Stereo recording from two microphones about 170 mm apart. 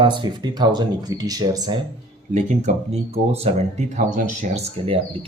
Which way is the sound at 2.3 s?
45° right (ahead or behind).